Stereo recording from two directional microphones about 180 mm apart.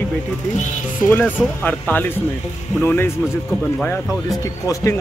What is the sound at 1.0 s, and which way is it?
Speech, 10° left (ahead or behind).